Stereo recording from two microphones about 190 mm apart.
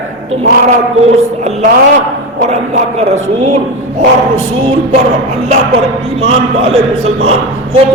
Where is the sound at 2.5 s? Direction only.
35° right (ahead or behind).